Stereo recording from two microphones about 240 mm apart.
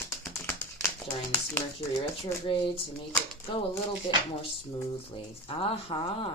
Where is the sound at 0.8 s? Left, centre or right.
Centre.